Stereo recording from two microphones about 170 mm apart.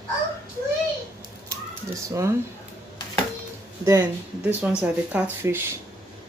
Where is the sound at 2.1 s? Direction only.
15° right (ahead or behind).